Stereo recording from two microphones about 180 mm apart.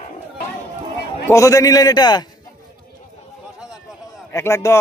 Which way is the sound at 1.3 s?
20° left (ahead or behind).